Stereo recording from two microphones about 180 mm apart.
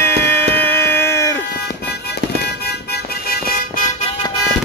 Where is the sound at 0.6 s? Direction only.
10° left (ahead or behind).